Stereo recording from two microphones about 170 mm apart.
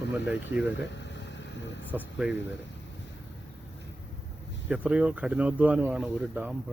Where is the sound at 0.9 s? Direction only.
90° left.